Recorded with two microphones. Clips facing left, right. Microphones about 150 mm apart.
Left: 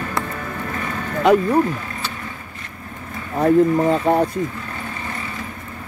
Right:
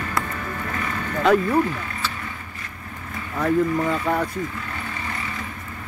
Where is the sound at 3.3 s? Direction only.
30° left (ahead or behind).